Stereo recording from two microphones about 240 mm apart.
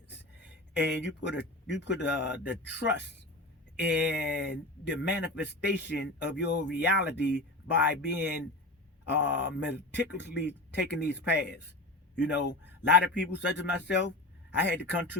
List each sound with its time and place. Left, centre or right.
0.3 s a man's voice: left